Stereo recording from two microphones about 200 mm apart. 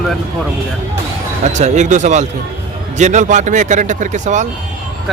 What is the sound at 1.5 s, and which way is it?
Speech, 35° right (ahead or behind).